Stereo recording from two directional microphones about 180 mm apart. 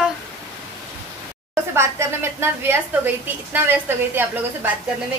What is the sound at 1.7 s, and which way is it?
A woman's voice, 15° right (ahead or behind).